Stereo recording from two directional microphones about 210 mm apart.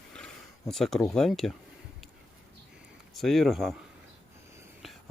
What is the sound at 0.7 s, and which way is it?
Speech, centre (ahead or behind).